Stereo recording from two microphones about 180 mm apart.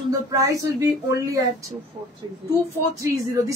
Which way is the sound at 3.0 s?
15° right (ahead or behind).